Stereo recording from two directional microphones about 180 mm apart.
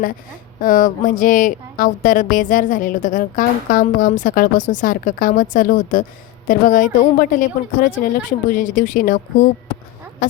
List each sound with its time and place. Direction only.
0.6 s speech: 50° left (ahead or behind)